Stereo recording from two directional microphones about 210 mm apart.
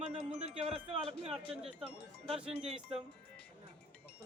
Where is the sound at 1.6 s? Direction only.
5° right (ahead or behind).